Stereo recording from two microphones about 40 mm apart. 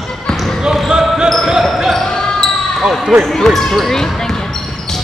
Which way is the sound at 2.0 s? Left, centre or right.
Centre.